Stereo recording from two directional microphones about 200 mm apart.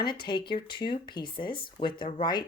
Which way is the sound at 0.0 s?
20° left (ahead or behind).